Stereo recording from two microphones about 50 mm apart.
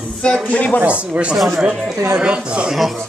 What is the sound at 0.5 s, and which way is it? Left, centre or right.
Speech, left.